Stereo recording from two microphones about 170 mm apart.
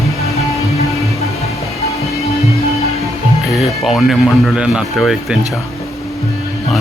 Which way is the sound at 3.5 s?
Centre (ahead or behind).